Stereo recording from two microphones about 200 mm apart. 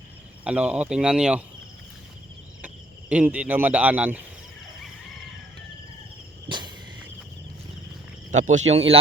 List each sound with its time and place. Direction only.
0.4 s speech: 5° right (ahead or behind)
3.1 s speech: 5° right (ahead or behind)
6.5 s a sound: 20° right (ahead or behind)
8.3 s speech: 35° right (ahead or behind)